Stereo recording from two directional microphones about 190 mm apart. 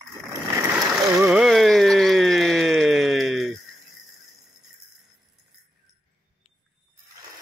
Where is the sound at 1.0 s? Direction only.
15° right (ahead or behind).